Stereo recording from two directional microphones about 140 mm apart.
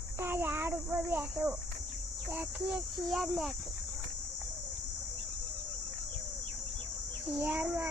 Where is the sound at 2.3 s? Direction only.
5° right (ahead or behind).